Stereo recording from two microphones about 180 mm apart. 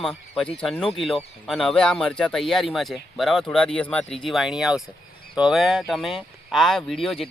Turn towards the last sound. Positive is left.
turn(degrees=5)  # may be behind; listen again after turning